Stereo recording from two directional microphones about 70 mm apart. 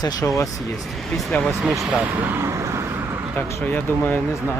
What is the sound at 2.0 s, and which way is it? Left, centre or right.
Speech, right.